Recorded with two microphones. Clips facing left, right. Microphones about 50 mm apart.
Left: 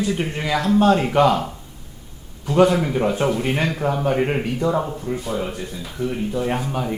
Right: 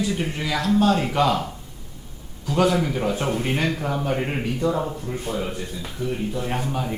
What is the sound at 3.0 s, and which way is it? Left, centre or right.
A man's voice, left.